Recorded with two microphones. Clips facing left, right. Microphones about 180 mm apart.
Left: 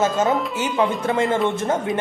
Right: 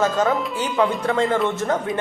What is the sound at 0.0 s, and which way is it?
Speech, 25° left (ahead or behind).